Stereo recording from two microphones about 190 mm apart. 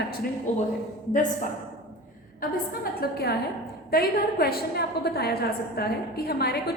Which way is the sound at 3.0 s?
55° left (ahead or behind).